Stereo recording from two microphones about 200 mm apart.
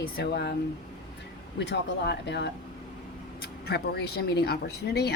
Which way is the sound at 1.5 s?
60° left (ahead or behind).